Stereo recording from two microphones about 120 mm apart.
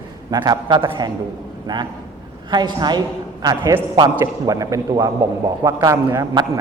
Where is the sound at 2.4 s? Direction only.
35° right (ahead or behind).